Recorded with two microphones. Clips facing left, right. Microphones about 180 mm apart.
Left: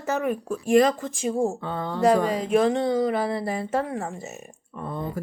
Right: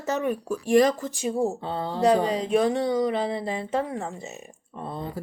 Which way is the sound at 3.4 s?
20° right (ahead or behind).